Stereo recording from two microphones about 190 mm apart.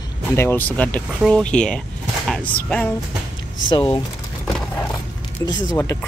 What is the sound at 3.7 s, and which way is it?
Speech, 25° left (ahead or behind).